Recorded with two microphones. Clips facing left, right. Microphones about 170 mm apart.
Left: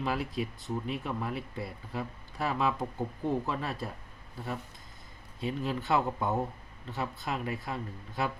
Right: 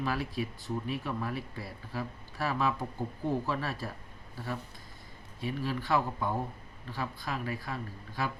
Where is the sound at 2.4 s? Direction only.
20° left (ahead or behind).